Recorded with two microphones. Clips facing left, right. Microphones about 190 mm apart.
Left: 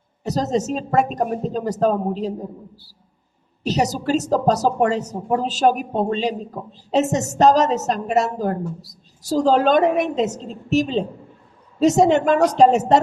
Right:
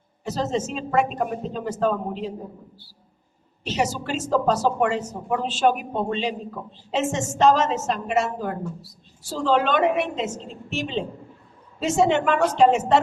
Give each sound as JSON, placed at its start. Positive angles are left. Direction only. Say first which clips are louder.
{"t": 0.3, "sound": "speech", "louder": "left 4 dB", "side_deg": 40}
{"t": 3.6, "sound": "speech", "louder": "left 4 dB", "side_deg": 40}